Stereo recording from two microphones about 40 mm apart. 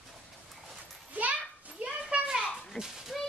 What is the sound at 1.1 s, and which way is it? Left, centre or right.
Children playing, right.